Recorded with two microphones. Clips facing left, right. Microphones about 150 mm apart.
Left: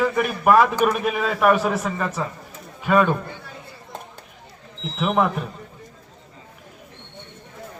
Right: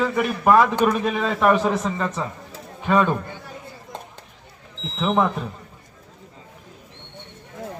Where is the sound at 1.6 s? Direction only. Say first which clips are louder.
Right 1 dB; 20° right (ahead or behind).